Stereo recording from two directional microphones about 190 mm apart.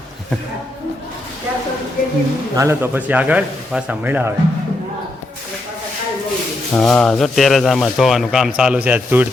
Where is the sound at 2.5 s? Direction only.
15° right (ahead or behind).